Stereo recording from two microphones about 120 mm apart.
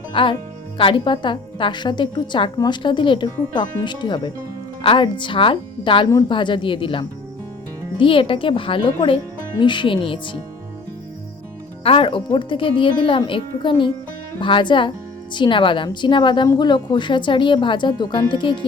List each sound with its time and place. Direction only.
0.1 s speech: 45° left (ahead or behind)
11.8 s speech: 50° left (ahead or behind)